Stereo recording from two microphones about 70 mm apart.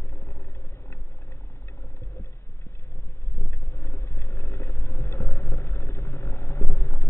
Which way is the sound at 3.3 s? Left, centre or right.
Left.